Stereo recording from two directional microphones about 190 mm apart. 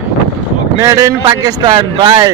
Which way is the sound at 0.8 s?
15° right (ahead or behind).